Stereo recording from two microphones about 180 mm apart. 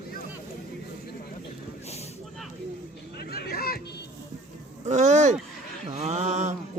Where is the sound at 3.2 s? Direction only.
60° left (ahead or behind).